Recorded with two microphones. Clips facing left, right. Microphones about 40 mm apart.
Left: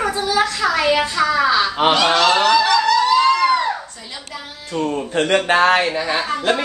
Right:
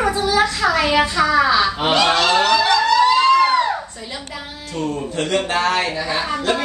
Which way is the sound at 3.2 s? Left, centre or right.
Centre.